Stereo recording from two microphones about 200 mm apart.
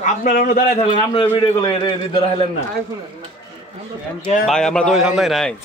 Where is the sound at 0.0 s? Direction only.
45° left (ahead or behind).